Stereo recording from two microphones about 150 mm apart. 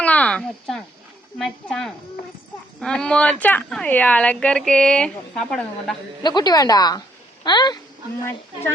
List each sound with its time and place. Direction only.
0.0 s speech: 10° left (ahead or behind)
6.2 s speech: 25° left (ahead or behind)